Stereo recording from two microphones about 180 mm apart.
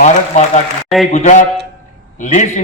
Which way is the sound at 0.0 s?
40° left (ahead or behind).